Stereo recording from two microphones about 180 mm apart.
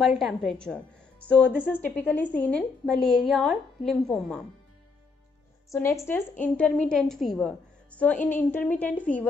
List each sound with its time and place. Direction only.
0.2 s a woman's voice: centre (ahead or behind)
5.7 s a woman's voice: 15° left (ahead or behind)